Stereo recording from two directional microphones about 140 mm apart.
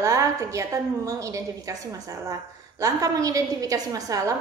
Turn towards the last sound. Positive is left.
turn(degrees=-25)  # may be behind; listen again after turning